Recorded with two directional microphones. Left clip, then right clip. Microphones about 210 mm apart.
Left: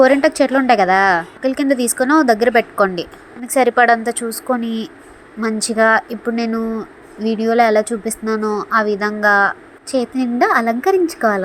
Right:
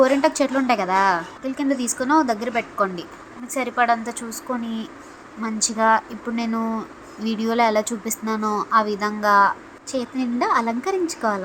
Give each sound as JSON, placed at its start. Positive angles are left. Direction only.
{"t": 0.0, "sound": "a woman's voice", "side_deg": 20}